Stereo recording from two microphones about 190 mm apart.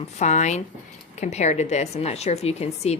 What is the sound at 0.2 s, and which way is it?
A woman's voice, 40° left (ahead or behind).